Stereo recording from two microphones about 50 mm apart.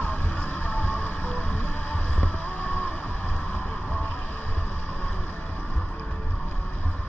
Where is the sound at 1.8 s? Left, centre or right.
Left.